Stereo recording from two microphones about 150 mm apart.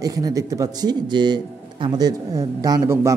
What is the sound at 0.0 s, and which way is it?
Speech, 25° right (ahead or behind).